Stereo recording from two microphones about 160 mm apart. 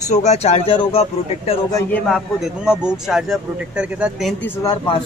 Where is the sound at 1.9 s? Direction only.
5° left (ahead or behind).